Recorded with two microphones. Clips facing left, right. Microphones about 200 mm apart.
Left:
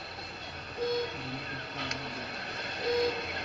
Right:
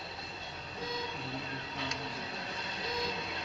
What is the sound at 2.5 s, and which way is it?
Train, 60° left (ahead or behind).